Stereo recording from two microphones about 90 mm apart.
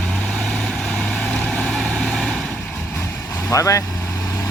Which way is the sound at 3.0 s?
20° left (ahead or behind).